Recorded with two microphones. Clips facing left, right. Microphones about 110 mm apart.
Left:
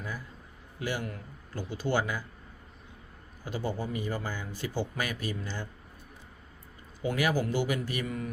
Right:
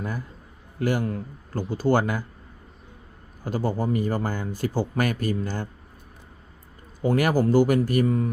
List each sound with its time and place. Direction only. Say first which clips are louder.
0.8 s speech: right 9 dB; 50° right (ahead or behind)
3.4 s speech: right 8 dB; 45° right (ahead or behind)
7.0 s speech: right 7 dB; 50° right (ahead or behind)
8.0 s speech: right 11 dB; 35° right (ahead or behind)